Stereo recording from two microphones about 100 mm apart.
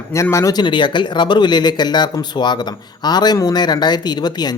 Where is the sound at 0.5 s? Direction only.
50° left (ahead or behind).